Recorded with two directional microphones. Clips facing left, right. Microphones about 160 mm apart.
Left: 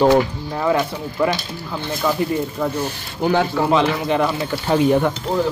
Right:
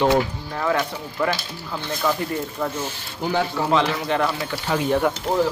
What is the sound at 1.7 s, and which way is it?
Speech, 10° left (ahead or behind).